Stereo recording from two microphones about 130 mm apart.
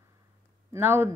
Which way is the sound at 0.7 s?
20° right (ahead or behind).